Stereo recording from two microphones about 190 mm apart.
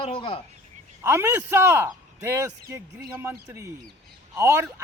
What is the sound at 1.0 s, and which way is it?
A man's voice, 10° right (ahead or behind).